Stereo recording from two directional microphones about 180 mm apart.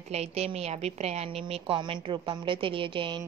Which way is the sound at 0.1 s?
35° right (ahead or behind).